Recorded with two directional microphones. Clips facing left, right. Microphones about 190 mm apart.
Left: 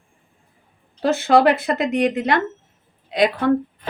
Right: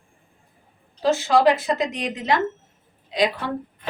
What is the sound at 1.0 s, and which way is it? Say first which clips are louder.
A woman's voice: left 2 dB; 60° left (ahead or behind).